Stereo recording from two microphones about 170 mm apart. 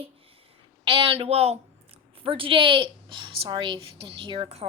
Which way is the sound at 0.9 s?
35° right (ahead or behind).